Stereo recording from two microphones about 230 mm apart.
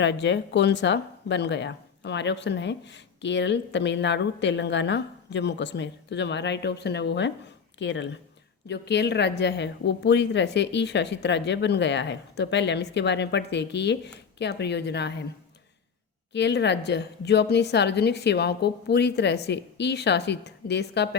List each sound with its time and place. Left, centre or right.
0.0 s speech: left
16.3 s speech: left